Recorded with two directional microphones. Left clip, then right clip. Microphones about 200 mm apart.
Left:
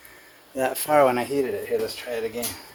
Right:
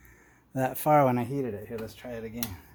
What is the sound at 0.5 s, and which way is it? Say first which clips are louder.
Speech: left 3 dB; 45° right (ahead or behind).